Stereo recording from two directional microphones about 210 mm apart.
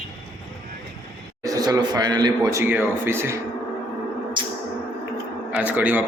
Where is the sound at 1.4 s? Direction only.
15° right (ahead or behind).